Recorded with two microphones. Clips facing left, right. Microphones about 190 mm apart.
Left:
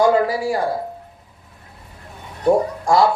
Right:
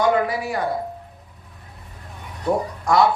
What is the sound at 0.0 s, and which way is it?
Speech, 25° left (ahead or behind).